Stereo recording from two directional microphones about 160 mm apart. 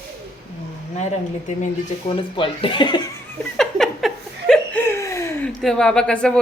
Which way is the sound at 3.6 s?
Centre (ahead or behind).